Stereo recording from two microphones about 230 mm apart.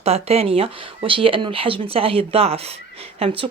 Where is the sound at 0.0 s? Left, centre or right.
Right.